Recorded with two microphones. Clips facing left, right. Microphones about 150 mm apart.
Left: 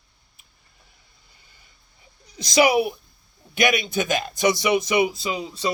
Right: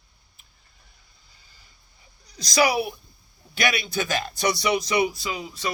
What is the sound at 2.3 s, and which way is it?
Speech, 20° left (ahead or behind).